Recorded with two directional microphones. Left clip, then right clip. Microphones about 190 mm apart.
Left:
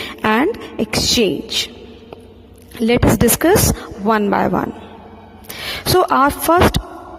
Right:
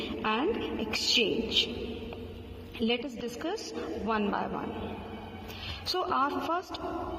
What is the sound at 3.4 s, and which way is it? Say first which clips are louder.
A woman's voice: left 17 dB; 70° left (ahead or behind).